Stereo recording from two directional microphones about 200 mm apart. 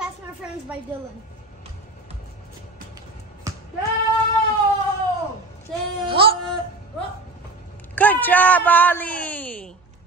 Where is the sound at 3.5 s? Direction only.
15° right (ahead or behind).